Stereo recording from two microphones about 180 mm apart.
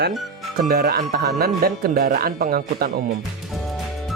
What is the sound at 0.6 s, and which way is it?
Speech, 55° right (ahead or behind).